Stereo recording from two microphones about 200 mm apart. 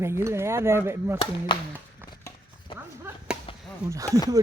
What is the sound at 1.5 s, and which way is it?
Speech, 25° left (ahead or behind).